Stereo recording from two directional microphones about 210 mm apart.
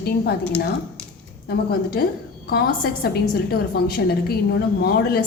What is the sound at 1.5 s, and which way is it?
A woman's voice, 45° left (ahead or behind).